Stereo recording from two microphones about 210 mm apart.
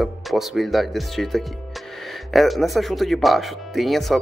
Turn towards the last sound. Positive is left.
turn(degrees=0)  # may be behind; listen again after turning